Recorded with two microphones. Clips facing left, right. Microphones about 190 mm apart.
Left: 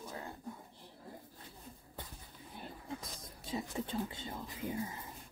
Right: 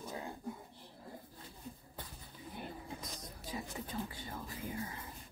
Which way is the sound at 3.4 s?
25° left (ahead or behind).